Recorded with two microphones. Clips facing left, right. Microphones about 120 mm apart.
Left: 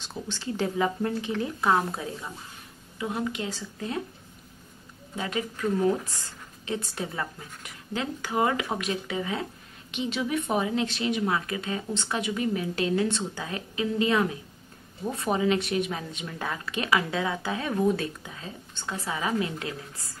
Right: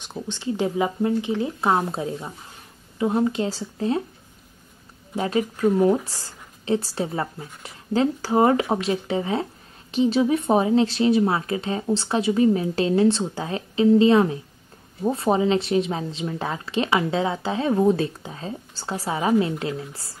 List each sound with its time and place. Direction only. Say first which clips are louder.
0.0 s a woman's voice: right 5 dB; 20° right (ahead or behind)
5.1 s a woman's voice: right 8 dB; 35° right (ahead or behind)